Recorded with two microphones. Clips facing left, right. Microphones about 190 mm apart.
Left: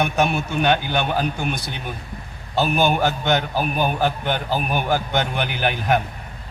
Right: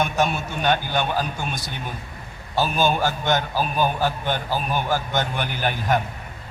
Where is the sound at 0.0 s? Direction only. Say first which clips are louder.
Left 2 dB; 65° left (ahead or behind).